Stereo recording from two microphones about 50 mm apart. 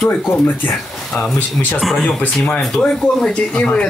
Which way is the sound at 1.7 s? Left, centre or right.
Centre.